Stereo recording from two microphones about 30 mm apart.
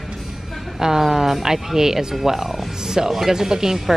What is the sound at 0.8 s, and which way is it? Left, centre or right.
Speech, centre.